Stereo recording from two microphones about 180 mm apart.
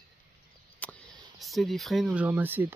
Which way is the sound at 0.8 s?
10° left (ahead or behind).